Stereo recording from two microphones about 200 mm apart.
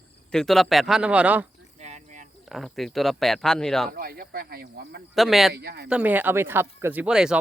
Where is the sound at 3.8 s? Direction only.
45° right (ahead or behind).